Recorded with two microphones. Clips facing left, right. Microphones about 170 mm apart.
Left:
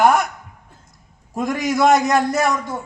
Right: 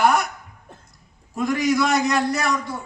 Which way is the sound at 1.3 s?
45° left (ahead or behind).